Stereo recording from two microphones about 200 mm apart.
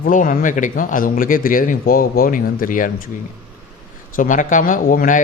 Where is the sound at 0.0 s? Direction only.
40° left (ahead or behind).